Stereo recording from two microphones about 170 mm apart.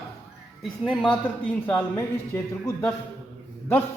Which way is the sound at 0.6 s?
Centre (ahead or behind).